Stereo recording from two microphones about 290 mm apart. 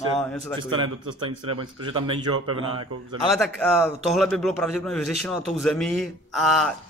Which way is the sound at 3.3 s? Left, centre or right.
Centre.